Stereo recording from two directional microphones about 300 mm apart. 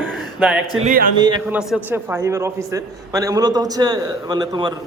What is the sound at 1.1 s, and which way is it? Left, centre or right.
A man's voice, centre.